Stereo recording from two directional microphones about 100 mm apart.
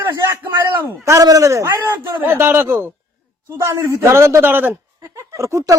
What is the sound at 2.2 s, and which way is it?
Speech, 20° right (ahead or behind).